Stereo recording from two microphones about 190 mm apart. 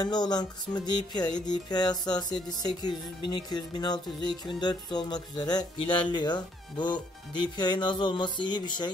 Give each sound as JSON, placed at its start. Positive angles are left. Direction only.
{"t": 0.0, "sound": "music", "side_deg": 20}